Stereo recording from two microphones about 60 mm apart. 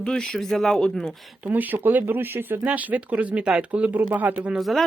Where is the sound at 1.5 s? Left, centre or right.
Right.